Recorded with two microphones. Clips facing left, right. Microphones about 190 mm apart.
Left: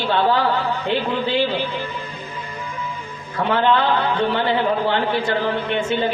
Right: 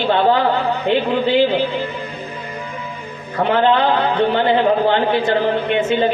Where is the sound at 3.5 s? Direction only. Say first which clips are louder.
Right 3 dB; 20° right (ahead or behind).